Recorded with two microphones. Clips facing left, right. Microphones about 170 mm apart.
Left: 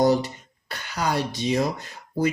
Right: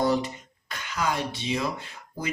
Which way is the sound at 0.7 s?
35° left (ahead or behind).